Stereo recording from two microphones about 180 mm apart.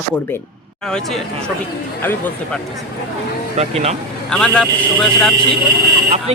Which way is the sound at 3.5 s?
35° right (ahead or behind).